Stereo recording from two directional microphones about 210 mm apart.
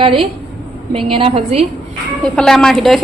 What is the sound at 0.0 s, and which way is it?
A woman's voice, 25° right (ahead or behind).